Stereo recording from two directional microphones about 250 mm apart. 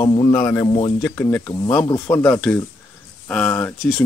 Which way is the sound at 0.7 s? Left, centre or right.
Left.